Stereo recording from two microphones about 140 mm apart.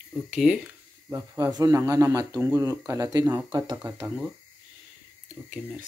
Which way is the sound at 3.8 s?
20° right (ahead or behind).